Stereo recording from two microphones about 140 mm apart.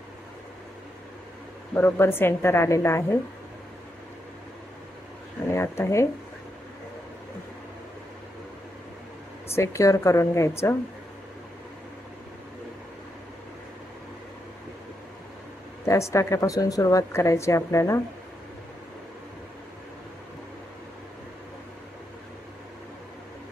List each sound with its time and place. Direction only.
1.7 s a woman's voice: 15° left (ahead or behind)
5.5 s speech: 20° left (ahead or behind)
9.5 s a woman's voice: 20° left (ahead or behind)
15.8 s a woman's voice: 20° left (ahead or behind)